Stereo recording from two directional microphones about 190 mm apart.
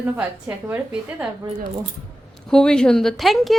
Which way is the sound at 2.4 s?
5° left (ahead or behind).